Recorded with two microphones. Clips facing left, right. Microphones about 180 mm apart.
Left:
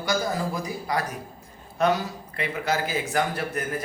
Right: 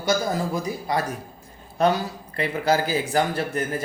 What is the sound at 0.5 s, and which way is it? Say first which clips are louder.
A man's voice: right 3 dB; 25° right (ahead or behind).